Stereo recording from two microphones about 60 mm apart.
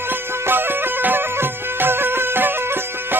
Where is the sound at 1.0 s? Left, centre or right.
Right.